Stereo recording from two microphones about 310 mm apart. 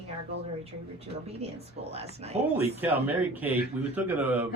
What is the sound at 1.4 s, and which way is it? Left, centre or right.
A woman's voice, centre.